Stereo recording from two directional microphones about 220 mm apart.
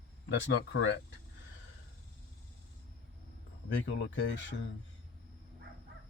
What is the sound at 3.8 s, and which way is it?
Speech, 55° left (ahead or behind).